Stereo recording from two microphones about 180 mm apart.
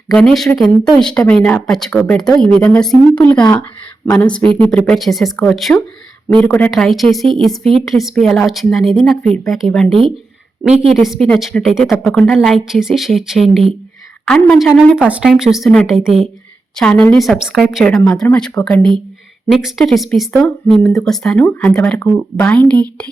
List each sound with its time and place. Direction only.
0.1 s speech: 5° left (ahead or behind)
4.0 s speech: 15° left (ahead or behind)
4.3 s speech: 5° left (ahead or behind)